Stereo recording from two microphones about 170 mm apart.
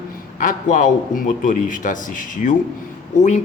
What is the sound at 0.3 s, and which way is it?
A man's voice, 50° left (ahead or behind).